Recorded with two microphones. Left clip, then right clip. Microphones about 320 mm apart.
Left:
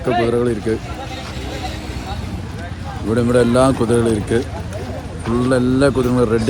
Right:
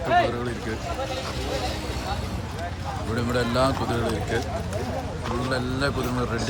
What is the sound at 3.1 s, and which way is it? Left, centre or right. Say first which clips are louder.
Speech: left 11 dB; centre.